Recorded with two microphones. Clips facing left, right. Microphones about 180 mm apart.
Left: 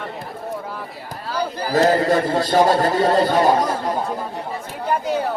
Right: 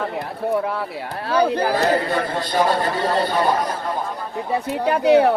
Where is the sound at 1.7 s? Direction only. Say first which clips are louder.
Left 3 dB; 45° left (ahead or behind).